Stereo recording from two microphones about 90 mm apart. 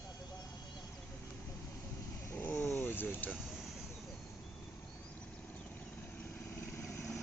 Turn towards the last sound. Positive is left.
turn(degrees=25)  # may be behind; listen again after turning